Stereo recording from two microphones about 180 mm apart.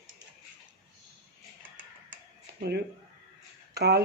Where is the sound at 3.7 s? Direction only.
65° right (ahead or behind).